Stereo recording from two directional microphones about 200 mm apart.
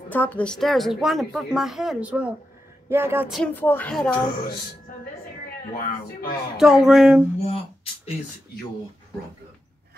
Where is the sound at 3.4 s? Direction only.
10° left (ahead or behind).